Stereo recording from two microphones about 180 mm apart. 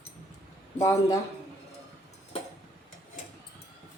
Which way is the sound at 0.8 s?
15° left (ahead or behind).